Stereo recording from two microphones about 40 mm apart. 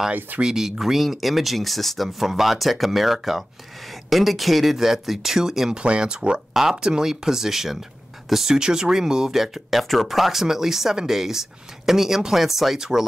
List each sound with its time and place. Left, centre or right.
0.4 s speech: centre
5.7 s speech: right
6.5 s speech: centre
8.5 s speech: centre